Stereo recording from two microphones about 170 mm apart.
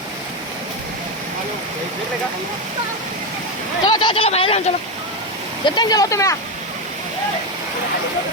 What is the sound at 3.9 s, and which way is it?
Speech, 30° left (ahead or behind).